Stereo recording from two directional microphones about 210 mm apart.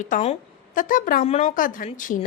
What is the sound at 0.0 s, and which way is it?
A woman's voice, 35° left (ahead or behind).